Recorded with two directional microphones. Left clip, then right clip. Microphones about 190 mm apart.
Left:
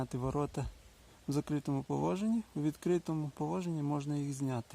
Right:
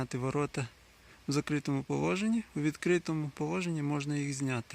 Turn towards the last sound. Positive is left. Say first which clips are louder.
# right 3 dB
turn(degrees=0)  # may be behind; listen again after turning